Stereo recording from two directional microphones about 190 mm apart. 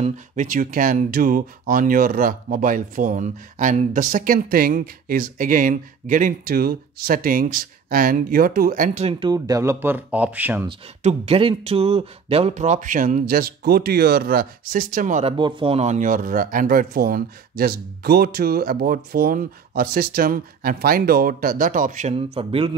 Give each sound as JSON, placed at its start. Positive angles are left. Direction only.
{"t": 0.0, "sound": "speech", "side_deg": -40}
{"t": 9.2, "sound": "speech", "side_deg": -20}
{"t": 11.0, "sound": "speech", "side_deg": -35}
{"t": 15.3, "sound": "speech", "side_deg": -25}